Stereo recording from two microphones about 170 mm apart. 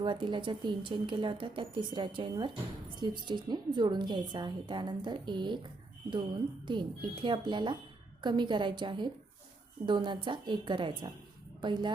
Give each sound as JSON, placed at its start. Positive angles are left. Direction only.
{"t": 0.0, "sound": "a woman's voice", "side_deg": -25}
{"t": 6.7, "sound": "a woman's voice", "side_deg": -25}